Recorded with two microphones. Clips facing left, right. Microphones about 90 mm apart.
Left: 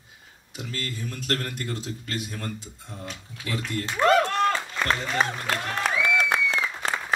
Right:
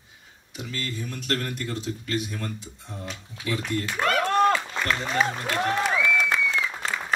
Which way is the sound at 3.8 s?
30° left (ahead or behind).